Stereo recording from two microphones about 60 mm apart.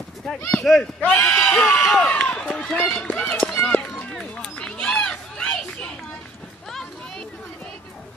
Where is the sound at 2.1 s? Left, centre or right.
Centre.